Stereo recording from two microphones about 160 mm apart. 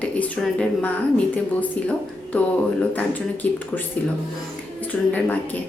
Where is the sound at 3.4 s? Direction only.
10° left (ahead or behind).